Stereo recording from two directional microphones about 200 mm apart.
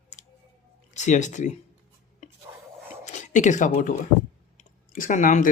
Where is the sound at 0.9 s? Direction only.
35° left (ahead or behind).